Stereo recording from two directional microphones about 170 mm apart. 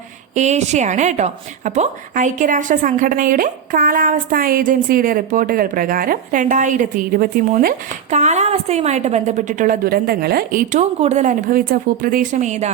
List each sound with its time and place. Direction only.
0.3 s a woman's voice: 40° right (ahead or behind); by 7.7 s 55° right (ahead or behind)
8.1 s a woman's voice: 40° right (ahead or behind)